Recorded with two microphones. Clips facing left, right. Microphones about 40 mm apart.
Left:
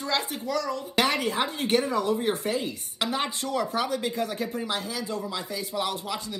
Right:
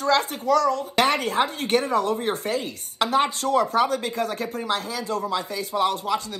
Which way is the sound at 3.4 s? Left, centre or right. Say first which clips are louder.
Right 7 dB; right.